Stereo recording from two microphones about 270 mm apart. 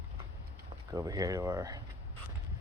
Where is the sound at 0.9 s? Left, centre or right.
Centre.